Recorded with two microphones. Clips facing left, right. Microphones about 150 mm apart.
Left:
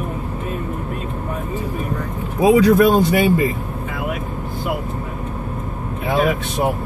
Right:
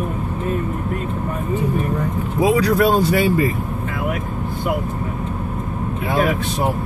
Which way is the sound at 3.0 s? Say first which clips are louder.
Left 1 dB; 20° left (ahead or behind).